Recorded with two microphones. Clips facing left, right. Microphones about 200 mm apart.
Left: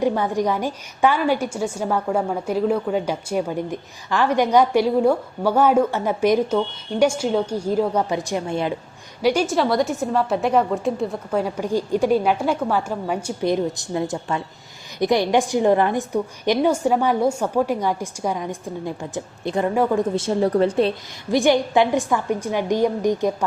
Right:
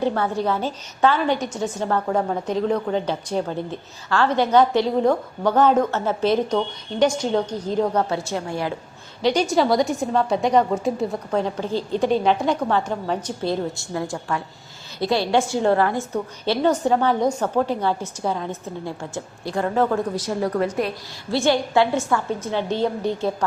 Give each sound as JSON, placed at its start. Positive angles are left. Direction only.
{"t": 0.0, "sound": "a woman's voice", "side_deg": 15}
{"t": 9.2, "sound": "a woman's voice", "side_deg": 5}
{"t": 20.1, "sound": "a woman's voice", "side_deg": 30}
{"t": 21.2, "sound": "a woman's voice", "side_deg": 15}